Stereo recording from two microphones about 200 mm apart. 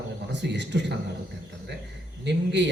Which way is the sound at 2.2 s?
60° right (ahead or behind).